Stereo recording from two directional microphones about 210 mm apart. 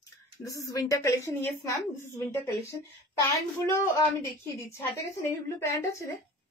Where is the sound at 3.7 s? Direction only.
15° left (ahead or behind).